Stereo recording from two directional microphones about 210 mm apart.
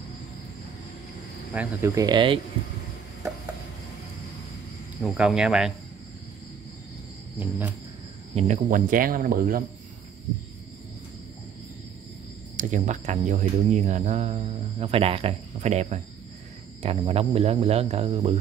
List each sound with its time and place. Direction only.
1.5 s speech: 10° right (ahead or behind)
5.0 s speech: 5° right (ahead or behind)
7.3 s speech: 10° right (ahead or behind)
8.4 s speech: 35° right (ahead or behind)
12.5 s speech: 35° right (ahead or behind)
17.0 s speech: 25° right (ahead or behind)